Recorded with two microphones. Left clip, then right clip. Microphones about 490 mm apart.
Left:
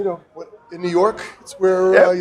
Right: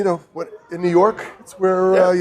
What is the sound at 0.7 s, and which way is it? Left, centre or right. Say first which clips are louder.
Speech: right 2 dB; right.